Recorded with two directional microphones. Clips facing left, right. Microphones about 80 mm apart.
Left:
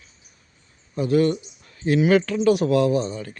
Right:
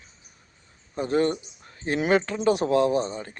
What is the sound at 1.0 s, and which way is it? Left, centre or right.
Speech, right.